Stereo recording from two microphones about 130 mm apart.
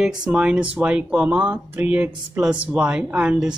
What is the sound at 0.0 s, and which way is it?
Speech, 5° right (ahead or behind).